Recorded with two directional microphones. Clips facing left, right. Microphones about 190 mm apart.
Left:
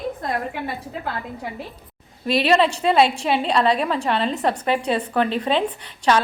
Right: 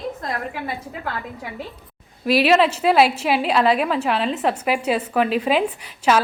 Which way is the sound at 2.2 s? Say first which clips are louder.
Right 2 dB; 5° right (ahead or behind).